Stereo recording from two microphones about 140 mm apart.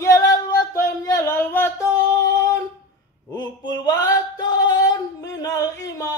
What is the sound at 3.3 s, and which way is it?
Singing, 30° left (ahead or behind).